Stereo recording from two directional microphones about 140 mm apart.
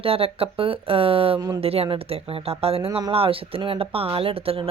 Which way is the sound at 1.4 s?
25° right (ahead or behind).